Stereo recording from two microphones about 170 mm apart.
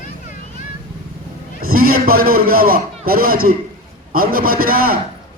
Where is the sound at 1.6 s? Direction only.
60° right (ahead or behind).